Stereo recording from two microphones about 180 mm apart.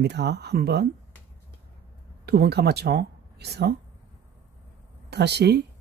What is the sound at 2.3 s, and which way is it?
Speech, 65° right (ahead or behind).